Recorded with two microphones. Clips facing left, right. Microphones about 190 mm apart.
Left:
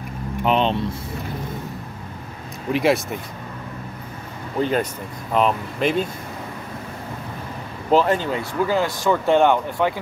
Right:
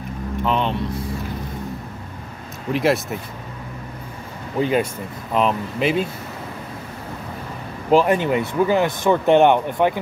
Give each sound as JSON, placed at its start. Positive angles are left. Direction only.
{"t": 0.4, "sound": "speech", "side_deg": 20}
{"t": 2.7, "sound": "speech", "side_deg": 0}
{"t": 4.6, "sound": "speech", "side_deg": -10}
{"t": 7.9, "sound": "speech", "side_deg": -15}